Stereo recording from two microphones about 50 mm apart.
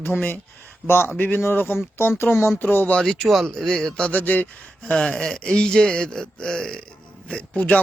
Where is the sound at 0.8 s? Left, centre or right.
Left.